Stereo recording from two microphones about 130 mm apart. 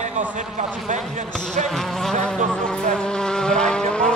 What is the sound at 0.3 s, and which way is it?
Speech, 70° right (ahead or behind).